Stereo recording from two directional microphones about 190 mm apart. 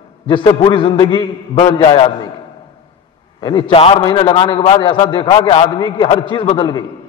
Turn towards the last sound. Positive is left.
turn(degrees=25)  # may be behind; listen again after turning